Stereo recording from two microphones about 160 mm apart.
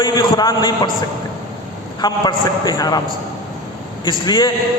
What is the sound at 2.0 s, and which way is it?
A man's voice, 25° left (ahead or behind).